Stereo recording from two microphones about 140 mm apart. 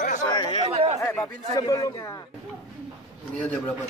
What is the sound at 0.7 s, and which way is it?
Chatter, 50° right (ahead or behind).